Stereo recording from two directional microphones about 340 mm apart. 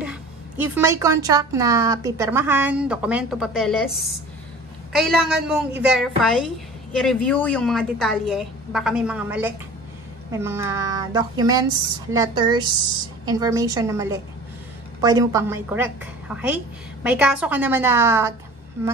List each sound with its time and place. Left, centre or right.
0.0 s a woman's voice: centre
4.9 s a woman's voice: centre